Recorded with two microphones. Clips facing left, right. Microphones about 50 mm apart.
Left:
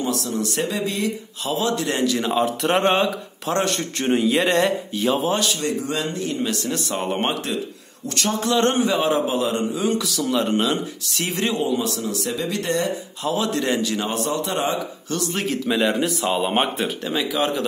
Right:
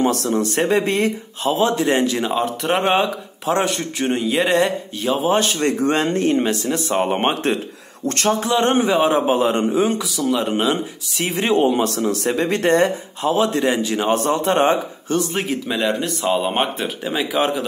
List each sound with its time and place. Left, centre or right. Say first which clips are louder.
0.0 s speech: right 6 dB; right
1.5 s speech: right 5 dB; right
2.3 s a man's voice: even; centre
5.3 s a man's voice: right 4 dB; right
5.6 s speech: right 6 dB; right
6.3 s speech: right 5 dB; right
8.4 s a man's voice: left 2 dB; centre
9.9 s speech: right 1 dB; centre
11.6 s speech: right 5 dB; right
14.1 s a man's voice: right 6 dB; right
15.3 s speech: even; centre
15.8 s a man's voice: right 1 dB; centre
17.0 s speech: right 4 dB; centre